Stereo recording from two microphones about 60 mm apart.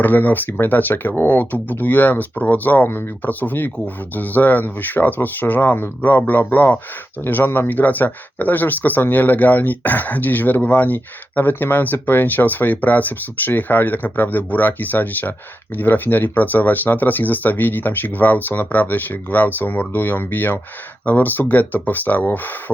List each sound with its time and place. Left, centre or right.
0.0 s speech: left